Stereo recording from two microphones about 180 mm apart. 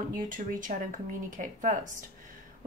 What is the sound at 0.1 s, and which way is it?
A woman's voice, 50° right (ahead or behind).